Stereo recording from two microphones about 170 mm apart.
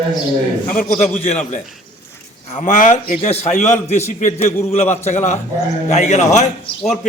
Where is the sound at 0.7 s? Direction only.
50° left (ahead or behind).